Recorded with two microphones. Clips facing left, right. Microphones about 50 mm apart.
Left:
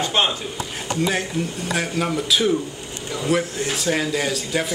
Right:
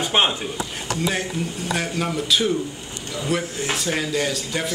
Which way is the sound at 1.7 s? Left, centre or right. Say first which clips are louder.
Left 1 dB; centre.